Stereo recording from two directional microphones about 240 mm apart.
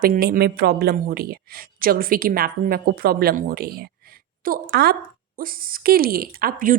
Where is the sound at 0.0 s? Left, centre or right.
Right.